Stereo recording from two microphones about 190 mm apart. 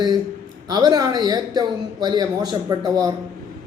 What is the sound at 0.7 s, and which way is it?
A woman's voice, 20° right (ahead or behind).